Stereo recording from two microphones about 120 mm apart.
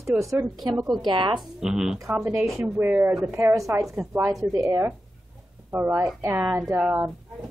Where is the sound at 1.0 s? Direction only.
40° right (ahead or behind).